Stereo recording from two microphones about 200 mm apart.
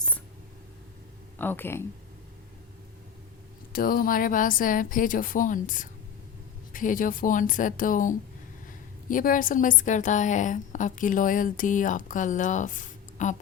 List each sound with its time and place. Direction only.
1.4 s speech: 10° left (ahead or behind)
3.7 s a woman's voice: 45° left (ahead or behind)